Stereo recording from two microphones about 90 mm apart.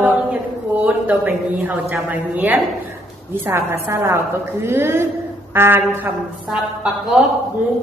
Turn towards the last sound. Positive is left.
turn(degrees=-5)  # may be behind; listen again after turning